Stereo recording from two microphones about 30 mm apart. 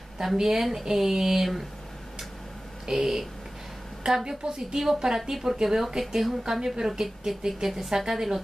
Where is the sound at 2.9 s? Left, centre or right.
Centre.